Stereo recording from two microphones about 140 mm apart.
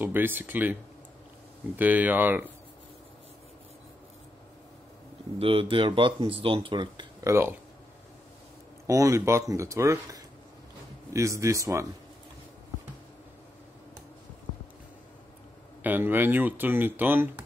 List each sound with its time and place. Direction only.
0.0 s speech: 15° right (ahead or behind)
1.8 s speech: 10° right (ahead or behind)
5.4 s speech: 40° right (ahead or behind)
7.2 s speech: 20° right (ahead or behind)
8.8 s speech: 25° right (ahead or behind)
15.8 s speech: 15° right (ahead or behind)